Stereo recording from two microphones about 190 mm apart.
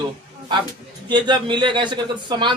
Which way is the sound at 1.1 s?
25° right (ahead or behind).